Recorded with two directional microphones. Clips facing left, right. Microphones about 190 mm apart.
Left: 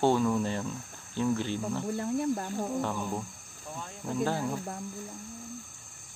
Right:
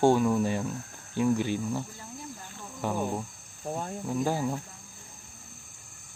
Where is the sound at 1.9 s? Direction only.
65° left (ahead or behind).